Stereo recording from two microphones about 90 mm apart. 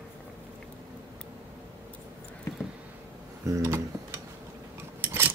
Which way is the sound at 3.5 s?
35° right (ahead or behind).